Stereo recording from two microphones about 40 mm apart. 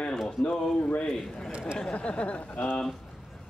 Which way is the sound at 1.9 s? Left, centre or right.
Left.